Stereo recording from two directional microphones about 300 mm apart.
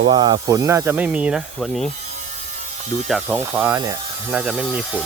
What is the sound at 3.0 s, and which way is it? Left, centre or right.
Speech, centre.